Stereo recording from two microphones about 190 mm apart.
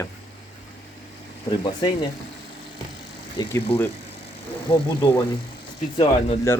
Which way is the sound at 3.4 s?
25° left (ahead or behind).